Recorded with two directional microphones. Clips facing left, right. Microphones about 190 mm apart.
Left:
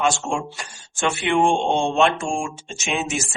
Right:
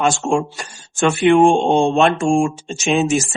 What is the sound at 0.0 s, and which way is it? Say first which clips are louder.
Speech: right 5 dB; 45° right (ahead or behind).